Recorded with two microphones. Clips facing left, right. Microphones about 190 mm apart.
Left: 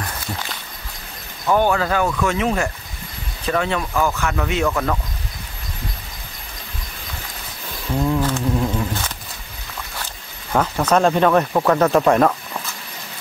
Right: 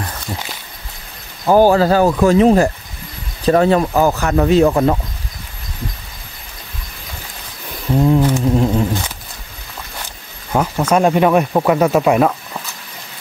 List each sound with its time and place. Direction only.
1.4 s speech: 35° right (ahead or behind)
8.0 s a sound: 20° right (ahead or behind)
10.5 s speech: 10° right (ahead or behind)